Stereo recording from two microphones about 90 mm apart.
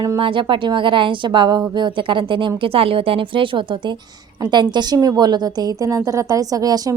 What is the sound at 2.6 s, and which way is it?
Speech, 90° right.